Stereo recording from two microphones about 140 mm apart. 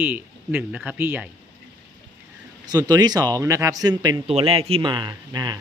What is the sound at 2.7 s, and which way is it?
Speech, 30° right (ahead or behind).